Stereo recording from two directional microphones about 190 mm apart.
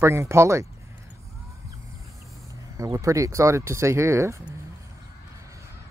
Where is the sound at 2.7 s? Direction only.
15° right (ahead or behind).